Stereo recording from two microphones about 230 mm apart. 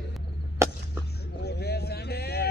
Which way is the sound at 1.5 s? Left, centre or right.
Left.